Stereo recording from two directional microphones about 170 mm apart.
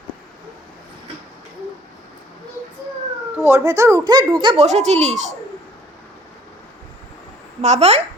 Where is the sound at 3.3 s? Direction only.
15° right (ahead or behind).